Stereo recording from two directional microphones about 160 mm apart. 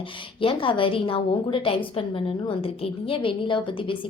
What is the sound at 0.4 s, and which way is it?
A woman's voice, 35° left (ahead or behind).